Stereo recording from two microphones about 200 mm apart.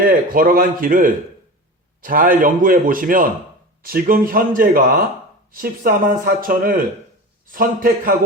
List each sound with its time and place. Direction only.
0.0 s speech: 45° right (ahead or behind)